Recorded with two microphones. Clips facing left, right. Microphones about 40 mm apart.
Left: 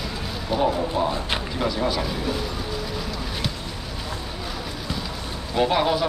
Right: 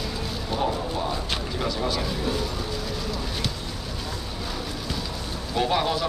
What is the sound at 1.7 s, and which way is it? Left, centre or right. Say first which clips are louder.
Speech: left 3 dB; centre.